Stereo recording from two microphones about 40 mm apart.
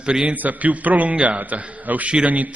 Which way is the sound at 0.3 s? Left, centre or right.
Right.